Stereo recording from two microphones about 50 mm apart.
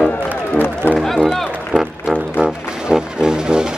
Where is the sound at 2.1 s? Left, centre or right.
Centre.